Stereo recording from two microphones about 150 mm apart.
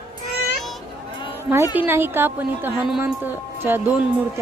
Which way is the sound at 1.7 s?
15° right (ahead or behind).